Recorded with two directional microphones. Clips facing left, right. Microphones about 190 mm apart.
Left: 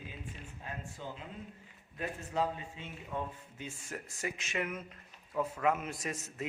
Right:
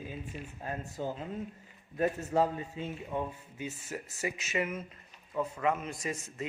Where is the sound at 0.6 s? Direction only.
45° right (ahead or behind).